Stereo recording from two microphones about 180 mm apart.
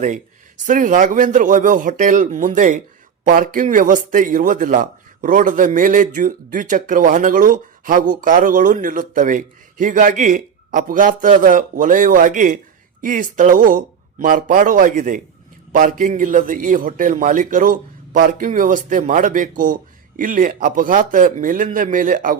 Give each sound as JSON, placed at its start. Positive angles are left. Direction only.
{"t": 0.7, "sound": "speech", "side_deg": -45}